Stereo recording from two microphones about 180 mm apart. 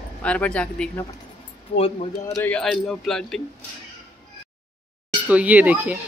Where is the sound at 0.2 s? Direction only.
5° left (ahead or behind).